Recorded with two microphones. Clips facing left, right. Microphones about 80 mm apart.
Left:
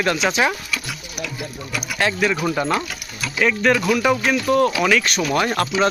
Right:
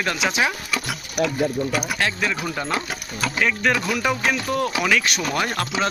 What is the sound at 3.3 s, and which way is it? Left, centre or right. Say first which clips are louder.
Speech: left 4 dB; centre.